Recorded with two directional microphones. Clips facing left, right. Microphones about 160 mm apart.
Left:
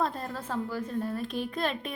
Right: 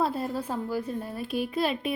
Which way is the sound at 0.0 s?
10° right (ahead or behind).